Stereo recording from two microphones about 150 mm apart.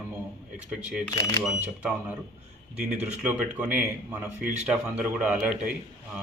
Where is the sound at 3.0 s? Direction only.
10° right (ahead or behind).